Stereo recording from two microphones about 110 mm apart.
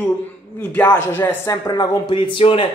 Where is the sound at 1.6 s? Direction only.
40° left (ahead or behind).